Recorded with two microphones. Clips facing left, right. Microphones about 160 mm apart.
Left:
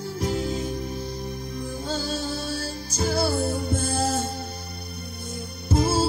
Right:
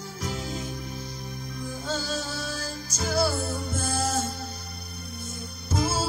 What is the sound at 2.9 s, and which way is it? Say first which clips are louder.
Music: left 2 dB; 30° left (ahead or behind).